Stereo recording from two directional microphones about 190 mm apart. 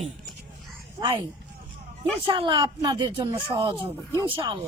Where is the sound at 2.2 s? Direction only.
25° right (ahead or behind).